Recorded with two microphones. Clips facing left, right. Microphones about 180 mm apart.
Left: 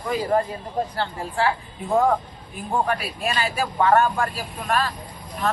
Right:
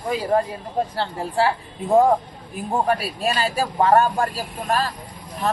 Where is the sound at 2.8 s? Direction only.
35° right (ahead or behind).